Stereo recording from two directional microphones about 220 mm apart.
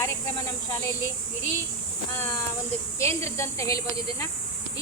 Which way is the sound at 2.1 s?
10° left (ahead or behind).